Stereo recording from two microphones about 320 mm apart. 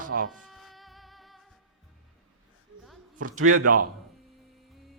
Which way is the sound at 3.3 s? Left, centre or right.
Right.